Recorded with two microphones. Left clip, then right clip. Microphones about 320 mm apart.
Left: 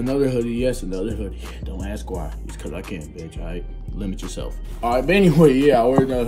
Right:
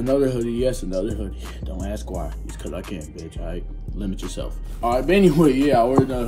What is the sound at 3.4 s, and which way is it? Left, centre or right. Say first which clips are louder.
Speech: even; left.